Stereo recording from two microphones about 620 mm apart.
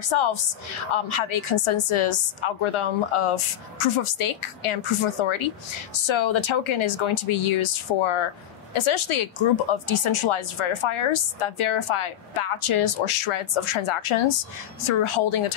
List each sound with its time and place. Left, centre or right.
0.0 s speech: left